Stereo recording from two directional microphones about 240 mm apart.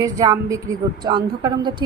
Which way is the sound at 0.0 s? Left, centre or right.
Centre.